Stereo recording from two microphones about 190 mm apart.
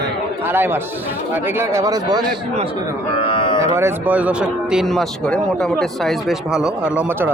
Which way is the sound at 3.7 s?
10° right (ahead or behind).